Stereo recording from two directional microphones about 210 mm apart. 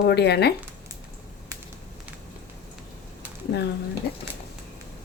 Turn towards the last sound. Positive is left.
turn(degrees=50)  # may be behind; listen again after turning